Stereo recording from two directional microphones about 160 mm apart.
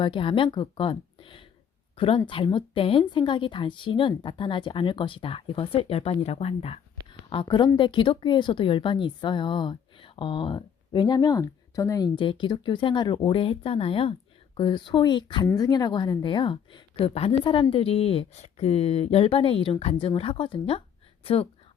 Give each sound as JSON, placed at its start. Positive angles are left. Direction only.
{"t": 0.0, "sound": "a woman's voice", "side_deg": 30}